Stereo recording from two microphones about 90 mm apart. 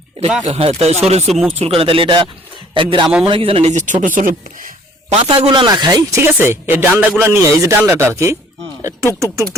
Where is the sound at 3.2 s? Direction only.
90° right.